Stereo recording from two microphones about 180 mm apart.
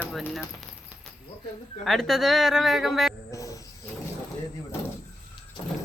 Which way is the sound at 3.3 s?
20° left (ahead or behind).